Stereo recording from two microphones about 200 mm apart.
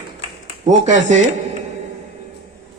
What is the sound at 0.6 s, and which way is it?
Chopping, 35° right (ahead or behind).